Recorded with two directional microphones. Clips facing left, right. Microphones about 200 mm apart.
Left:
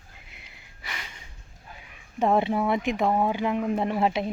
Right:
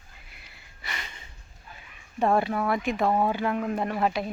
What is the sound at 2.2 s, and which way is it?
A woman's voice, 20° left (ahead or behind).